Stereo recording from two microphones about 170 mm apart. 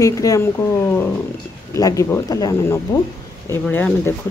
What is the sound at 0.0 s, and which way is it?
Speech, 20° left (ahead or behind).